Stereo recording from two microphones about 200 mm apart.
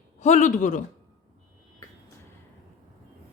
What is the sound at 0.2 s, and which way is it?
Speech, 35° left (ahead or behind).